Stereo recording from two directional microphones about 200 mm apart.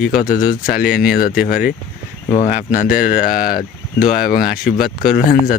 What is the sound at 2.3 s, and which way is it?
Speech, 35° left (ahead or behind).